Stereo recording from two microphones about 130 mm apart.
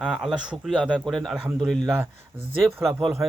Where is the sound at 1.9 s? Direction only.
15° right (ahead or behind).